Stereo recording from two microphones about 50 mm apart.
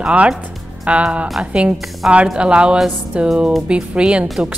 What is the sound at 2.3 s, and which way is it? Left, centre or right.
A woman's voice, right.